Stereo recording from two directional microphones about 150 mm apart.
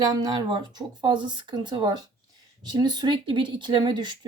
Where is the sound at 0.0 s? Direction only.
25° right (ahead or behind).